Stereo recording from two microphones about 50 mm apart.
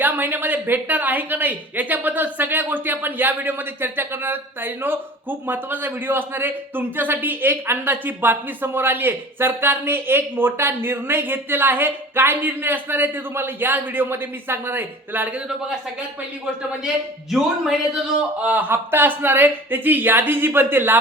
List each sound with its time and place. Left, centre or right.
0.0 s a man's voice: right
17.3 s speech: centre
18.5 s a man's voice: right